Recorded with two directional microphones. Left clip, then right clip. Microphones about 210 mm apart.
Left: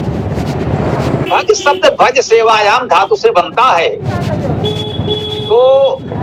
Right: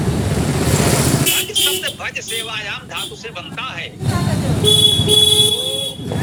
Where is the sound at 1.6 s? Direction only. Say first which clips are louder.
Left 12 dB; 20° right (ahead or behind).